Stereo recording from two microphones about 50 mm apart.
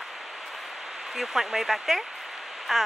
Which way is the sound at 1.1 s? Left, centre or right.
Centre.